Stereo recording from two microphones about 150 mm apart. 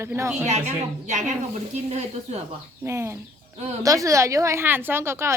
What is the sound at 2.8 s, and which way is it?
Speech, 15° right (ahead or behind).